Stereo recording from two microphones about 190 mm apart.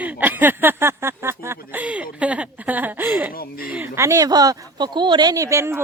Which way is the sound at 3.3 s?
50° left (ahead or behind).